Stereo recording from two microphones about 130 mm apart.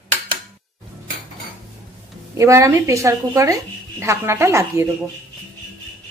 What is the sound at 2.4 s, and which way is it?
A woman's voice, 25° right (ahead or behind).